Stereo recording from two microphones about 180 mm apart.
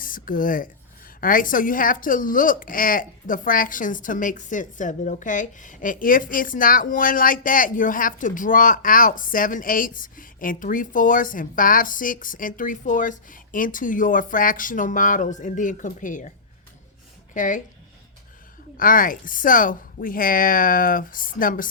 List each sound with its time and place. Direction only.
0.0 s a woman's voice: 50° left (ahead or behind)
17.3 s a woman's voice: 45° left (ahead or behind)
18.8 s a woman's voice: 50° left (ahead or behind)